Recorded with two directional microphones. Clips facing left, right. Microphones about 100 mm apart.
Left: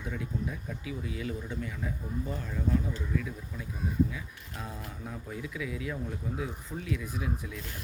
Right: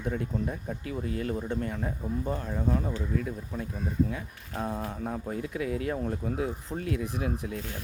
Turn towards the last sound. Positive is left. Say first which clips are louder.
# right 4 dB
turn(degrees=-60)  # may be behind; listen again after turning